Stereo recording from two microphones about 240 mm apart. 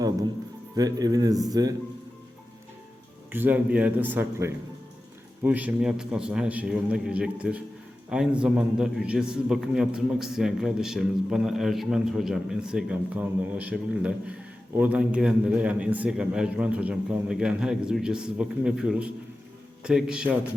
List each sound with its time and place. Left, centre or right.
0.8 s speech: centre
3.3 s a man's voice: centre